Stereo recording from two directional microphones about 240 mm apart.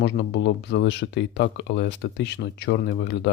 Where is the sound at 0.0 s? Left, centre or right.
Left.